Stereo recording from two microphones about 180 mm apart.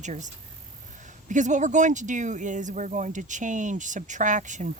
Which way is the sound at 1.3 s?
45° right (ahead or behind).